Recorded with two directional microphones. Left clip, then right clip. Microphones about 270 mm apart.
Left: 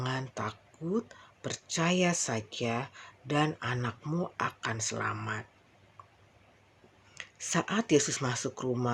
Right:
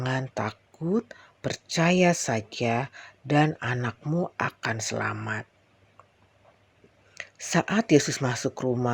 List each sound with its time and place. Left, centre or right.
0.0 s speech: right
7.1 s speech: right